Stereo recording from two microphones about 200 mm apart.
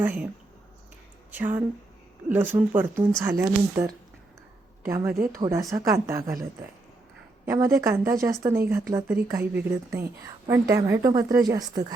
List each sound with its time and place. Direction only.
0.0 s a woman's voice: 10° right (ahead or behind)
1.3 s a woman's voice: 10° right (ahead or behind)
7.4 s a woman's voice: 15° right (ahead or behind)